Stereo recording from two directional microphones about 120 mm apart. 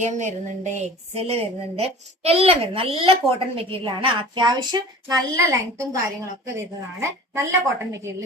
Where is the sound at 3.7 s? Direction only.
50° right (ahead or behind).